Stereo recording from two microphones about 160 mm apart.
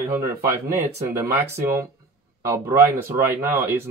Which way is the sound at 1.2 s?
15° right (ahead or behind).